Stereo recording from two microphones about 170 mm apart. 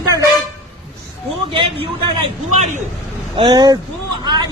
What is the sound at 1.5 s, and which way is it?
A man's voice, 30° right (ahead or behind).